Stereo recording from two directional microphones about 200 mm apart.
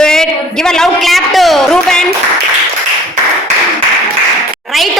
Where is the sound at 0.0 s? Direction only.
5° left (ahead or behind).